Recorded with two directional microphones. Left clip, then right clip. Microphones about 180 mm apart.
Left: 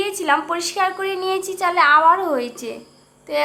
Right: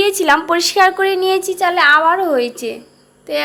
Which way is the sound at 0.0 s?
25° right (ahead or behind).